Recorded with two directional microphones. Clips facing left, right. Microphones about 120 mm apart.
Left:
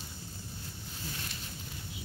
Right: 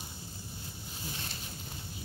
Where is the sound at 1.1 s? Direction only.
30° right (ahead or behind).